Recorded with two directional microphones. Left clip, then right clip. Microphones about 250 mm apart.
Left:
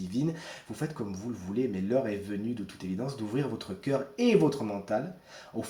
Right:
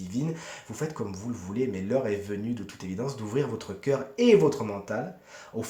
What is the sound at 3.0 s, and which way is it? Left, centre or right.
Speech, right.